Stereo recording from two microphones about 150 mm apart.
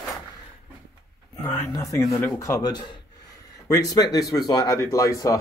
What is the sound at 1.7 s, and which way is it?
Speech, 20° left (ahead or behind).